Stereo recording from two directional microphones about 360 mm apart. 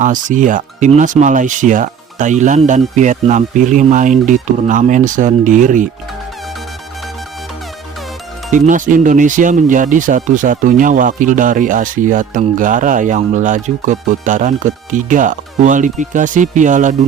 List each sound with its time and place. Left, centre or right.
0.0 s speech: right
8.4 s speech: right